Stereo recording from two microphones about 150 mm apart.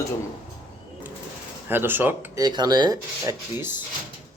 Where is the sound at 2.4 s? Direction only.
25° right (ahead or behind).